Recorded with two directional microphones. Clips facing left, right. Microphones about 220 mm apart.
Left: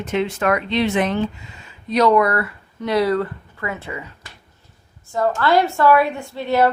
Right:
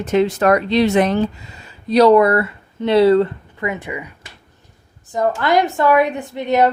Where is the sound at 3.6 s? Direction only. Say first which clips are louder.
Right 4 dB; 15° right (ahead or behind).